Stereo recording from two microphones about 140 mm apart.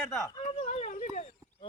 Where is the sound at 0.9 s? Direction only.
65° left (ahead or behind).